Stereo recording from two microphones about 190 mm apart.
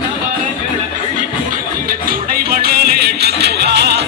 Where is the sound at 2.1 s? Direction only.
50° right (ahead or behind).